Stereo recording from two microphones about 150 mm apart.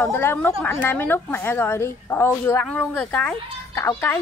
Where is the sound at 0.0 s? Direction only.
15° left (ahead or behind).